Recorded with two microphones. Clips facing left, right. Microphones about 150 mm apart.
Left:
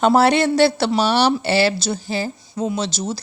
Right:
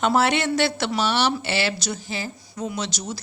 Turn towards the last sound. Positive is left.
turn(degrees=30)  # may be behind; listen again after turning